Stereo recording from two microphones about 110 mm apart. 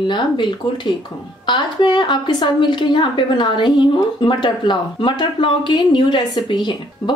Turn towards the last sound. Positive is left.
turn(degrees=45)  # may be behind; listen again after turning